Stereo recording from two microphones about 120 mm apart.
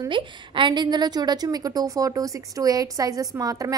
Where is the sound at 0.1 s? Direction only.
40° right (ahead or behind).